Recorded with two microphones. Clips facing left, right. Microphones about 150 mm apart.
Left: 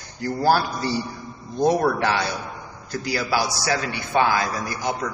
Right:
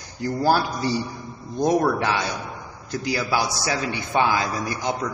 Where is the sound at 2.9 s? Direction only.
20° right (ahead or behind).